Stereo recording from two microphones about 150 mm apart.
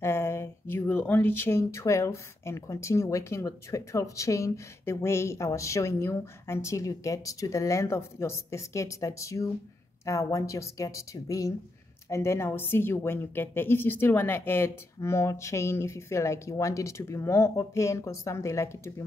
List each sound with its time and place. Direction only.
0.0 s speech: 15° left (ahead or behind)